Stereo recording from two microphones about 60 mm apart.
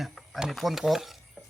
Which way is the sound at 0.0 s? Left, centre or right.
Centre.